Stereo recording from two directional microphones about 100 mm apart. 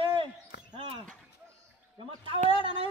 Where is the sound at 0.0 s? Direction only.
60° right (ahead or behind).